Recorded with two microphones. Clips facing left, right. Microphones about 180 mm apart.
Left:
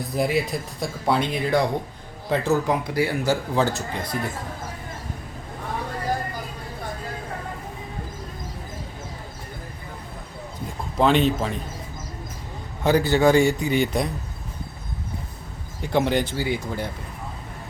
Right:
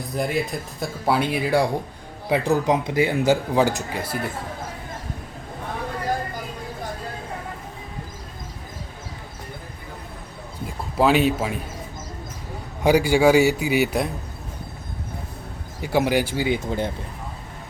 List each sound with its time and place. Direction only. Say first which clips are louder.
0.1 s speech: left 1 dB; centre (ahead or behind)
10.9 s speech: right 1 dB; 5° right (ahead or behind)
12.8 s speech: right 2 dB; 10° right (ahead or behind)
15.8 s speech: right 1 dB; 5° right (ahead or behind)